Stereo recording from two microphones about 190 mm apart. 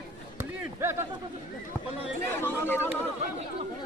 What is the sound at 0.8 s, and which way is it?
Speech, 15° right (ahead or behind).